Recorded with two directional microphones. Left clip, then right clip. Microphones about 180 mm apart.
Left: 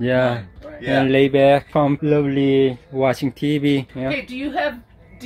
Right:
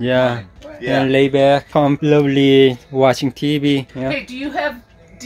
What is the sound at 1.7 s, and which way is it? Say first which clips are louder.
Speech: right 3 dB; 15° right (ahead or behind).